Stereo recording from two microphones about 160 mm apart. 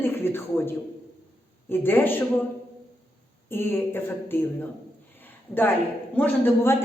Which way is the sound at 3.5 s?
15° left (ahead or behind).